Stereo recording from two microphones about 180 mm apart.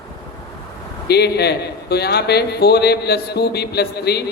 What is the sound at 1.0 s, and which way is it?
A man's voice, 65° left (ahead or behind).